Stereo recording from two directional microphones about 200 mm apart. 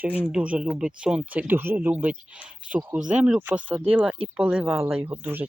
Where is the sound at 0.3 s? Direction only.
5° right (ahead or behind).